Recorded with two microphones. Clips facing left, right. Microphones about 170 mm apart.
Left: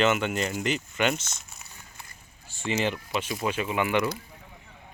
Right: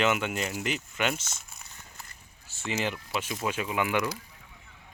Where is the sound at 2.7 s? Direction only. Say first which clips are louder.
Left 4 dB; 5° right (ahead or behind).